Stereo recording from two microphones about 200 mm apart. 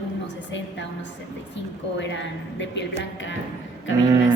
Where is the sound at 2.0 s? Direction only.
65° left (ahead or behind).